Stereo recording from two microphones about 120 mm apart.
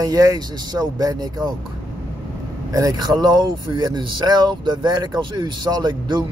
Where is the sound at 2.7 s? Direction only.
30° right (ahead or behind).